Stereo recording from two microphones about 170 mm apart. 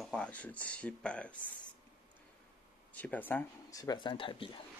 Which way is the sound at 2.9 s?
10° left (ahead or behind).